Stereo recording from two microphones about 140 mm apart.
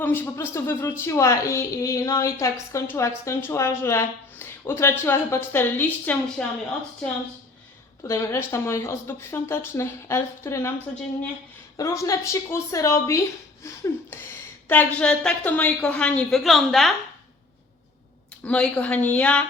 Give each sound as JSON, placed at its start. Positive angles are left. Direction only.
{"t": 0.0, "sound": "a woman's voice", "side_deg": 15}
{"t": 8.0, "sound": "a woman's voice", "side_deg": 20}
{"t": 11.8, "sound": "a woman's voice", "side_deg": 25}
{"t": 18.4, "sound": "speech", "side_deg": 10}